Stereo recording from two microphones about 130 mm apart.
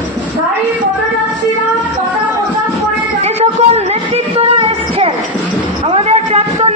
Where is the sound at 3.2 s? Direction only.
55° right (ahead or behind).